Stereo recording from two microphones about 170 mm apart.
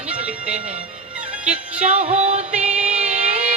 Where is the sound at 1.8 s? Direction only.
40° right (ahead or behind).